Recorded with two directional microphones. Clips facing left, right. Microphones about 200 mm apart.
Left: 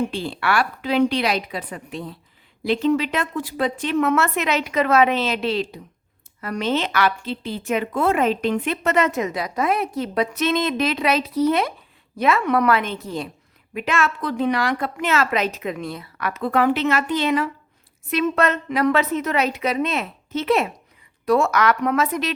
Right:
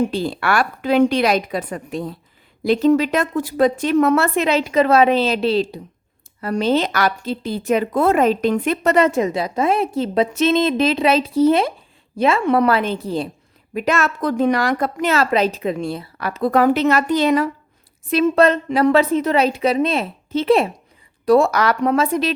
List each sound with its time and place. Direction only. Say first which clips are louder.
0.0 s a woman's voice: right 4 dB; 40° right (ahead or behind)